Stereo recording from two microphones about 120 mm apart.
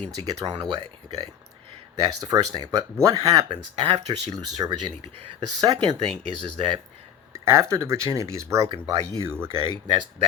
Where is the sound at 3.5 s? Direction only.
50° right (ahead or behind).